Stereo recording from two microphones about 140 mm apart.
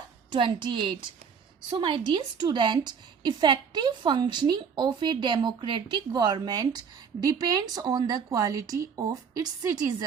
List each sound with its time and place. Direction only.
0.3 s a woman's voice: 35° right (ahead or behind)